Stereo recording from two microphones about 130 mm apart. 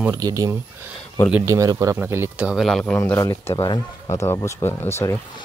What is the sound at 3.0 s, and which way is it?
A man's voice, 25° left (ahead or behind).